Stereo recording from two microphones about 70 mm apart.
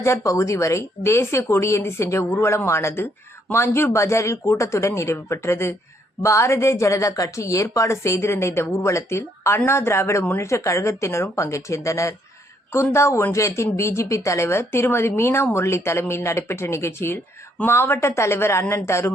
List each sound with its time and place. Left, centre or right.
0.0 s speech: left